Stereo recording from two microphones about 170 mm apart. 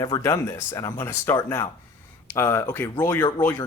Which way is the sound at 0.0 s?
20° left (ahead or behind).